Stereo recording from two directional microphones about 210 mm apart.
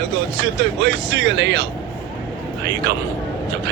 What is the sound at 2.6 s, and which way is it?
Speech, 55° right (ahead or behind).